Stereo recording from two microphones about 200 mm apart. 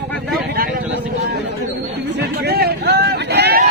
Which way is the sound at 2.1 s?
55° right (ahead or behind).